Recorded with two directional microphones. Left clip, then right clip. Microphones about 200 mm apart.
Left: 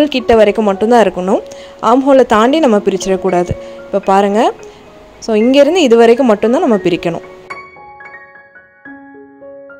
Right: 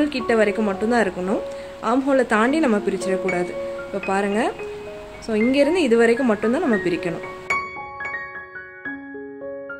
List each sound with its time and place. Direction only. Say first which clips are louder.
0.0 s speech: left 10 dB; 35° left (ahead or behind)